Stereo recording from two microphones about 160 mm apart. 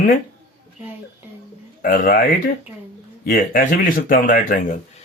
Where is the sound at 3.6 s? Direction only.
60° left (ahead or behind).